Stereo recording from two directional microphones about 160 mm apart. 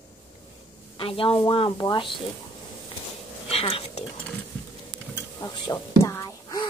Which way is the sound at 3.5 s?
35° left (ahead or behind).